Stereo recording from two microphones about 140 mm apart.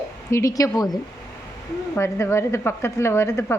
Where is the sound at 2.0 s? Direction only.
20° left (ahead or behind).